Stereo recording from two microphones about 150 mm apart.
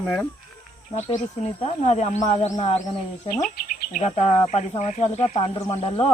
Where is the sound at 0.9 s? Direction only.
45° left (ahead or behind).